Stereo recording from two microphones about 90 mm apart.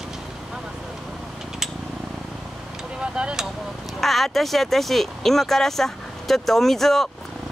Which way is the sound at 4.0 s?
Centre (ahead or behind).